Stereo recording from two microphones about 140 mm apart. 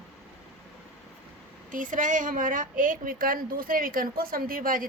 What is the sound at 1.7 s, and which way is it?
A woman's voice, 70° right (ahead or behind).